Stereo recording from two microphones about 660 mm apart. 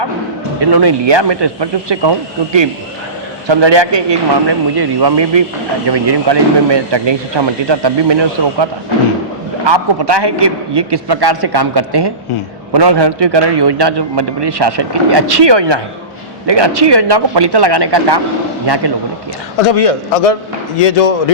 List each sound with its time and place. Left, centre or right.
0.6 s a man's voice: right
9.6 s a man's voice: right
19.6 s a man's voice: left